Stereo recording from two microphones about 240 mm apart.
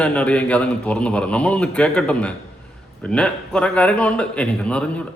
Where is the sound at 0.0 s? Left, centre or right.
Centre.